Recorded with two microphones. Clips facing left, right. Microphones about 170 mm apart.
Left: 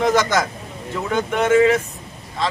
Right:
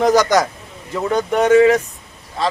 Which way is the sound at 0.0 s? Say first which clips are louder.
Right 4 dB; 40° right (ahead or behind).